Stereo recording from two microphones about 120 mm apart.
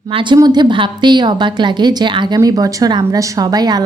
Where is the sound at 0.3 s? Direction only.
35° right (ahead or behind).